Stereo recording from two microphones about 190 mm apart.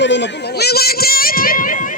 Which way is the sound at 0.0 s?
70° left (ahead or behind).